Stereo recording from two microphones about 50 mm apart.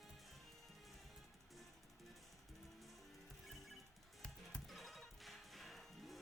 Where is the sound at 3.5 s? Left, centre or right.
Centre.